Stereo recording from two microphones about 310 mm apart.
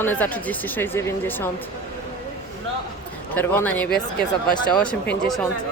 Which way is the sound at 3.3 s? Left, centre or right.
Centre.